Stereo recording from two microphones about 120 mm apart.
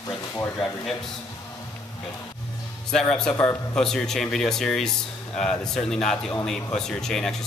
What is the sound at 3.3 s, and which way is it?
Speech, 20° left (ahead or behind).